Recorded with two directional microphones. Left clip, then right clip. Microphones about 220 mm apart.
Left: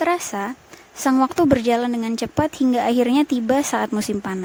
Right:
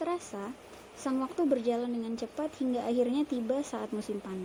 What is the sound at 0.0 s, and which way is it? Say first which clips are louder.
Speech: left 14 dB; 50° left (ahead or behind).